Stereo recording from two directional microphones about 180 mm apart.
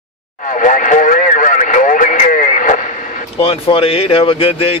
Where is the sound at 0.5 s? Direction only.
45° left (ahead or behind).